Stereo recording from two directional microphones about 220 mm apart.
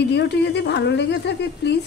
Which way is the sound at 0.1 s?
50° left (ahead or behind).